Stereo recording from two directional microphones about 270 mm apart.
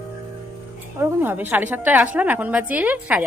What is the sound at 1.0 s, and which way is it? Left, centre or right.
A woman's voice, centre.